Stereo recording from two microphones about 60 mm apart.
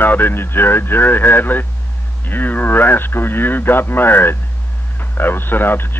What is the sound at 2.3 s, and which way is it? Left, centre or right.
Speech, left.